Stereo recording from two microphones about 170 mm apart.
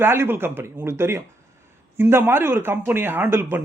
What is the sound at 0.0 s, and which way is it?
Speech, 15° right (ahead or behind).